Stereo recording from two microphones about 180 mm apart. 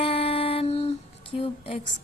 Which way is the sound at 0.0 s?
30° left (ahead or behind).